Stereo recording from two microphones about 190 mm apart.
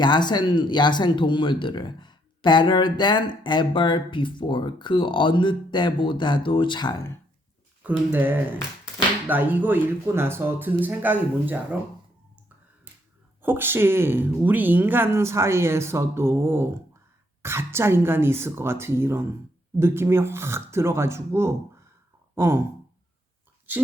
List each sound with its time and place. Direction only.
0.0 s speech: 25° left (ahead or behind)
7.9 s speech: 10° right (ahead or behind)
13.4 s speech: 10° right (ahead or behind)